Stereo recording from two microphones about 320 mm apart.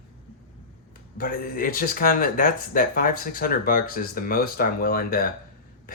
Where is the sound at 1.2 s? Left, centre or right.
Left.